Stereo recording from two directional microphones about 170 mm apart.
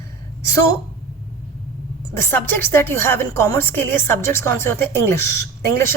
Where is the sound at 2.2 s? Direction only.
10° left (ahead or behind).